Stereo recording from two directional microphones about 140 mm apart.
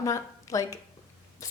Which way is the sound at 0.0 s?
25° left (ahead or behind).